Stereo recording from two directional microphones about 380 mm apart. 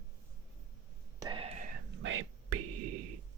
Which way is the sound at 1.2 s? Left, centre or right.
Centre.